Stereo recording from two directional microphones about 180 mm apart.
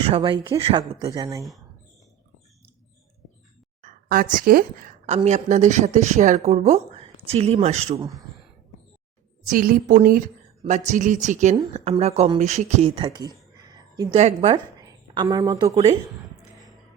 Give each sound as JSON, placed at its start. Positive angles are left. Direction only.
{"t": 0.0, "sound": "speech", "side_deg": -30}
{"t": 3.8, "sound": "speech", "side_deg": -45}
{"t": 5.0, "sound": "speech", "side_deg": -35}
{"t": 9.5, "sound": "a woman's voice", "side_deg": -50}
{"t": 10.6, "sound": "a woman's voice", "side_deg": -40}
{"t": 14.2, "sound": "speech", "side_deg": -40}
{"t": 14.5, "sound": "speech", "side_deg": -20}